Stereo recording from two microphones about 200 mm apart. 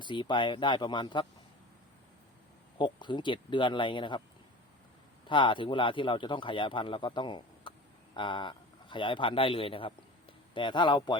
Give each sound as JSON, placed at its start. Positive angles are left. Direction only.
{"t": 0.0, "sound": "speech", "side_deg": 25}
{"t": 2.7, "sound": "speech", "side_deg": 25}
{"t": 5.3, "sound": "speech", "side_deg": 25}